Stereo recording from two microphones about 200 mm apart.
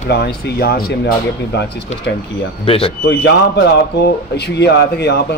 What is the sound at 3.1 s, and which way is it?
Speech, 60° left (ahead or behind).